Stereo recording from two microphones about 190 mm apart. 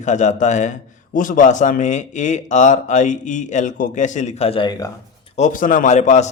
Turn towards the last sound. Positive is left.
turn(degrees=35)  # may be behind; listen again after turning